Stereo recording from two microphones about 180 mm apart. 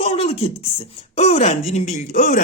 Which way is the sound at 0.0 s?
35° left (ahead or behind).